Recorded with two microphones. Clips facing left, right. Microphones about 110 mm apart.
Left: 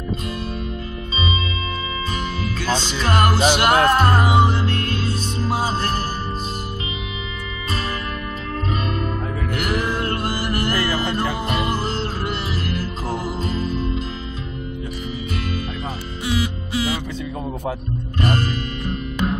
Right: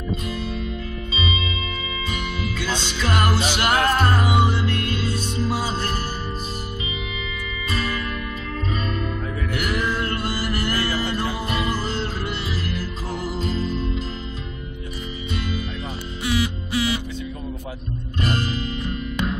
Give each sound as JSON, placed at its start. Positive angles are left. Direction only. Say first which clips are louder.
{"t": 2.1, "sound": "music", "louder": "left 2 dB", "side_deg": 40}
{"t": 7.7, "sound": "music", "louder": "even", "side_deg": 40}
{"t": 18.2, "sound": "music", "louder": "left 3 dB", "side_deg": 50}